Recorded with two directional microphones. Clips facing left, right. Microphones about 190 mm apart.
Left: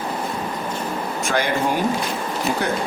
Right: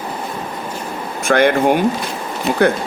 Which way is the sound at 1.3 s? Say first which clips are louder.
Right 9 dB; 60° right (ahead or behind).